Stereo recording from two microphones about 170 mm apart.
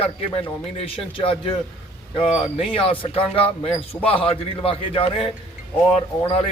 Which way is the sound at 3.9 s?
10° left (ahead or behind).